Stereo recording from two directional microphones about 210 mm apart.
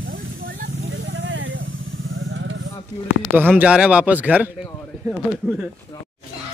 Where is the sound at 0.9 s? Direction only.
60° right (ahead or behind).